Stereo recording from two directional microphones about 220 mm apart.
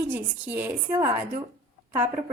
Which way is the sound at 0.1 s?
10° right (ahead or behind).